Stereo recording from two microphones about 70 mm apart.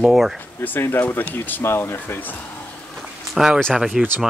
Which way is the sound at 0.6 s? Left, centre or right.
Left.